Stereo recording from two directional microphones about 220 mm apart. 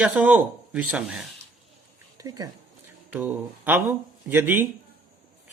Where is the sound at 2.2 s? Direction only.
15° right (ahead or behind).